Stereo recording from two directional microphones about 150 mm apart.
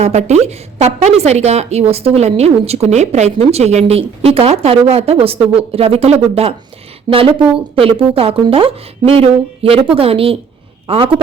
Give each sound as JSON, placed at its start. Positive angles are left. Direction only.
{"t": 0.0, "sound": "a woman's voice", "side_deg": -50}